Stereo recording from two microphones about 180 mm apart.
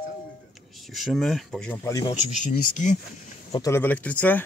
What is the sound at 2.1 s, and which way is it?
Speech, 45° left (ahead or behind).